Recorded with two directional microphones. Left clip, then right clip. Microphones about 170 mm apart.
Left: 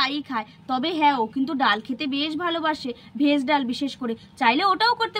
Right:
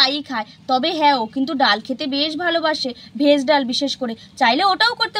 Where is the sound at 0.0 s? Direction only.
30° right (ahead or behind).